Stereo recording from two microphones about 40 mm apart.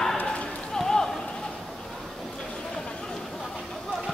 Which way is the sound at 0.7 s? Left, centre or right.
Centre.